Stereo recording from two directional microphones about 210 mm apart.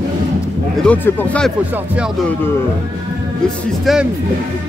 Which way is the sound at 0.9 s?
5° left (ahead or behind).